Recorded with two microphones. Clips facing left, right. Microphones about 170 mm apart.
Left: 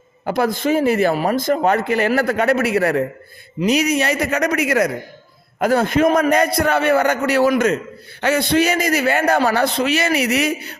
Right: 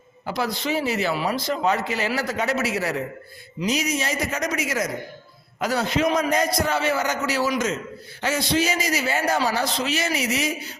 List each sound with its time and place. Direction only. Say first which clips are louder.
0.3 s a man's voice: left 8 dB; 50° left (ahead or behind)